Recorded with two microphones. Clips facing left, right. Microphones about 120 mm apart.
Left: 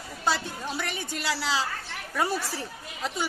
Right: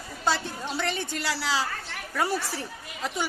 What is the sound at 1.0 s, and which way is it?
Speech, 20° left (ahead or behind).